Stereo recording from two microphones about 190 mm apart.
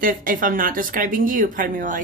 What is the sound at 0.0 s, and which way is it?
Speech, 45° right (ahead or behind).